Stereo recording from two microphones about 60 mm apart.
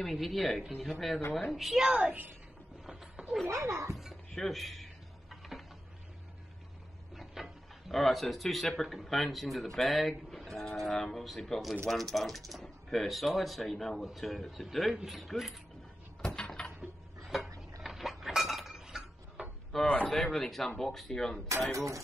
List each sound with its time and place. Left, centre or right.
0.0 s a woman's voice: centre
2.9 s a sound: centre
3.4 s a child's voice: right
4.4 s a sound: centre
7.2 s speech: centre
16.3 s a sound: centre
17.2 s tick-tock: centre
17.8 s chink: centre
19.7 s speech: centre
21.7 s a child's voice: right